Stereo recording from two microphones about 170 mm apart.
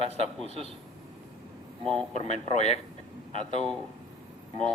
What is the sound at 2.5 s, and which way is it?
Speech, 40° left (ahead or behind).